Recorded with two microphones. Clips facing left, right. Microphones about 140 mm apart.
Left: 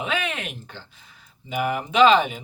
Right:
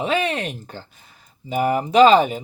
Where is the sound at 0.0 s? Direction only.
35° right (ahead or behind).